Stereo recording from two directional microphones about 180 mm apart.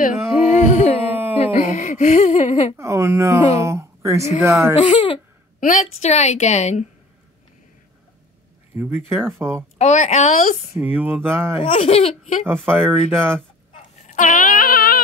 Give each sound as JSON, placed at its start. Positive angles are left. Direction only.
{"t": 0.6, "sound": "a sound", "side_deg": 40}
{"t": 1.1, "sound": "a sound", "side_deg": -10}
{"t": 1.7, "sound": "a sound", "side_deg": 45}
{"t": 2.8, "sound": "speech", "side_deg": -15}
{"t": 4.7, "sound": "speech", "side_deg": 30}
{"t": 5.6, "sound": "a woman's voice", "side_deg": 45}
{"t": 8.7, "sound": "speech", "side_deg": -10}
{"t": 9.8, "sound": "speech", "side_deg": 40}
{"t": 10.8, "sound": "speech", "side_deg": -10}
{"t": 11.6, "sound": "speech", "side_deg": 30}
{"t": 12.6, "sound": "speech", "side_deg": -10}
{"t": 14.0, "sound": "a sound", "side_deg": 45}